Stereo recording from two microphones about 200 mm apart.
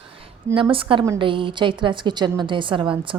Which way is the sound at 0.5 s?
25° right (ahead or behind).